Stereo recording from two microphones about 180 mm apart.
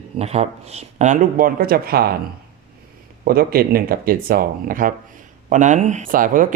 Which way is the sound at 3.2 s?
55° right (ahead or behind).